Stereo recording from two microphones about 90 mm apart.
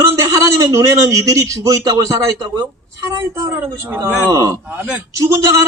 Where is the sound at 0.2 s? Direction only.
40° right (ahead or behind).